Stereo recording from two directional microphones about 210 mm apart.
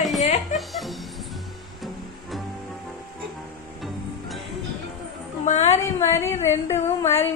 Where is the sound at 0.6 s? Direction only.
Centre (ahead or behind).